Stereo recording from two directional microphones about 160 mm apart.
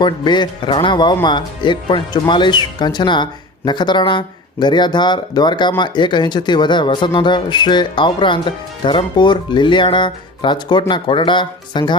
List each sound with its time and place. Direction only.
0.0 s speech: 30° left (ahead or behind)